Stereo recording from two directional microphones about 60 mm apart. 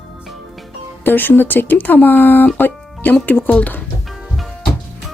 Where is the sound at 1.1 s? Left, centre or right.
Left.